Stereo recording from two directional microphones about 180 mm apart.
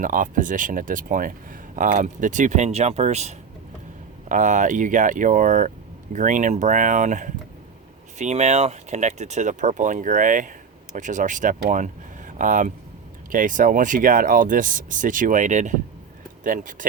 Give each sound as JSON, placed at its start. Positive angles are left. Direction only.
{"t": 0.0, "sound": "speech", "side_deg": -45}